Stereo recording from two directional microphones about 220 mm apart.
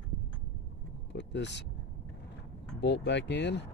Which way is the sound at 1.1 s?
50° left (ahead or behind).